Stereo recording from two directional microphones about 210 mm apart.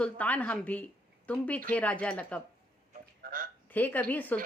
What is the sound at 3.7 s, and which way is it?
Speech, 10° left (ahead or behind).